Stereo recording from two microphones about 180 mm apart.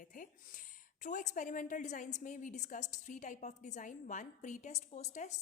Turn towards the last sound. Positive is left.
turn(degrees=40)  # may be behind; listen again after turning